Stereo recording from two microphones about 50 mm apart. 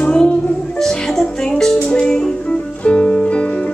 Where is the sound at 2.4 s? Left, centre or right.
Left.